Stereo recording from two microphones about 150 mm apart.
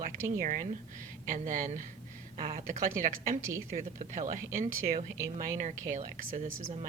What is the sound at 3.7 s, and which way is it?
Speech, 55° right (ahead or behind).